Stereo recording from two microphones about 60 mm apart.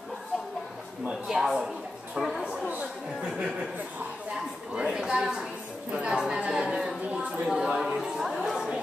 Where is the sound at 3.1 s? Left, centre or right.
Centre.